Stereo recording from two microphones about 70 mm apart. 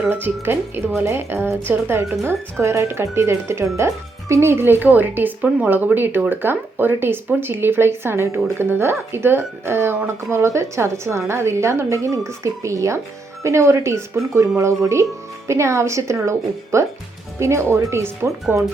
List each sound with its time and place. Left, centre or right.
0.1 s a woman's voice: right